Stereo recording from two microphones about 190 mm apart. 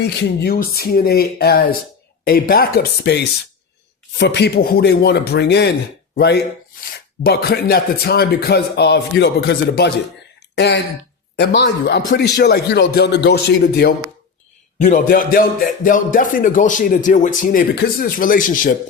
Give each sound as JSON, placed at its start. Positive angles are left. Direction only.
{"t": 0.0, "sound": "speech", "side_deg": 60}
{"t": 14.8, "sound": "speech", "side_deg": 45}